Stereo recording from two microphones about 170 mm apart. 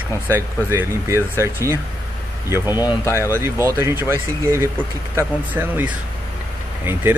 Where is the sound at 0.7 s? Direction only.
15° right (ahead or behind).